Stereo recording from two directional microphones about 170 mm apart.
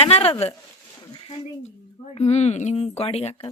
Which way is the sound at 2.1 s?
40° left (ahead or behind).